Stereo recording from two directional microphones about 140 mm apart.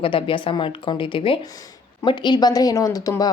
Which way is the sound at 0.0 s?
40° left (ahead or behind).